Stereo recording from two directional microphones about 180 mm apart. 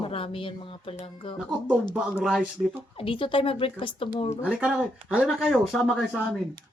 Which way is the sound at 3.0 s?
30° left (ahead or behind).